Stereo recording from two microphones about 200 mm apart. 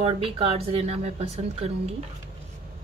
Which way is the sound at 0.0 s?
30° right (ahead or behind).